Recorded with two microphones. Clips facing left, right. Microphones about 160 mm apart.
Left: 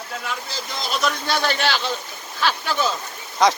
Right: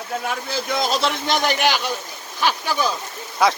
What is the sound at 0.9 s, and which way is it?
Speech, 30° right (ahead or behind).